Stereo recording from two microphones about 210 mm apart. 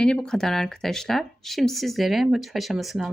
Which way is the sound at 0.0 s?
5° left (ahead or behind).